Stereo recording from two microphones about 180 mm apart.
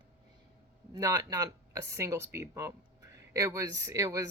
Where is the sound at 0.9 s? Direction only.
20° right (ahead or behind).